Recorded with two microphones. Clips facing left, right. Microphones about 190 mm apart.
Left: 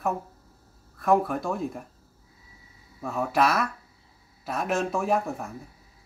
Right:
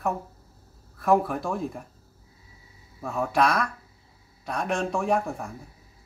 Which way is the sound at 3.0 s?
Centre (ahead or behind).